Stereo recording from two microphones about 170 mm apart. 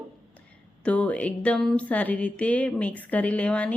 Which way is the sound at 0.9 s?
5° left (ahead or behind).